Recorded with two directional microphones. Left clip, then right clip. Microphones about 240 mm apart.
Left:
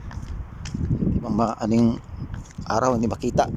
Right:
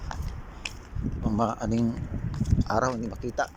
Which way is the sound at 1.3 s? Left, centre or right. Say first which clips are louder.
Left 4 dB; centre.